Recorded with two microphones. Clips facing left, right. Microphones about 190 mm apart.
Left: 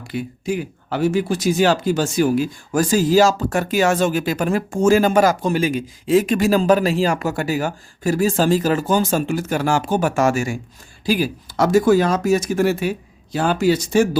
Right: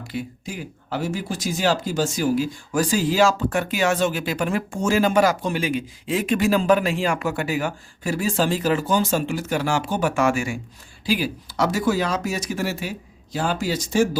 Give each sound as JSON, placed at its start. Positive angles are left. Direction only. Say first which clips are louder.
{"t": 0.1, "sound": "speech", "louder": "left 8 dB", "side_deg": 65}